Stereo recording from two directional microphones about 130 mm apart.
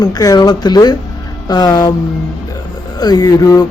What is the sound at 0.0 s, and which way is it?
Speech, 30° left (ahead or behind).